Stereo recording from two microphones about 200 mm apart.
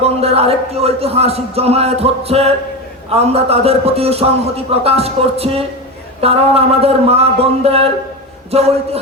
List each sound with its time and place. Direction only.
0.0 s a man's voice: 30° right (ahead or behind)